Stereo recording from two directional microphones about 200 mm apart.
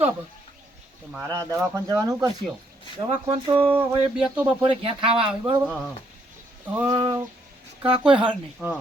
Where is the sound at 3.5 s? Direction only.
25° right (ahead or behind).